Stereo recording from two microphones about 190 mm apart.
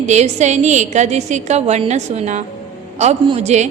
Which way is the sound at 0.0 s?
35° right (ahead or behind).